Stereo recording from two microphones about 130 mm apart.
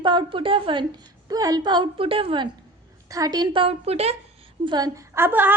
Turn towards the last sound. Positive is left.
turn(degrees=-15)  # may be behind; listen again after turning